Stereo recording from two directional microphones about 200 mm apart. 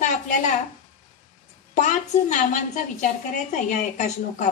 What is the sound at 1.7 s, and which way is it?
A woman's voice, 35° left (ahead or behind).